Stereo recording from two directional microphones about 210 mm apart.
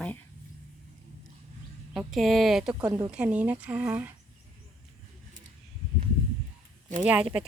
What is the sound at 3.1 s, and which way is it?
Speech, 5° right (ahead or behind).